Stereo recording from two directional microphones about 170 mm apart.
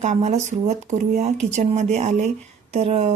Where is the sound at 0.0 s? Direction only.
45° right (ahead or behind).